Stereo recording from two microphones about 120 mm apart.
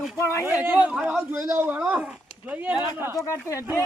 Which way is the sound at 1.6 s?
10° right (ahead or behind).